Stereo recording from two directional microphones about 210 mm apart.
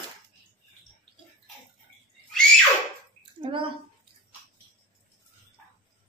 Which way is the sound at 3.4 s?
25° right (ahead or behind).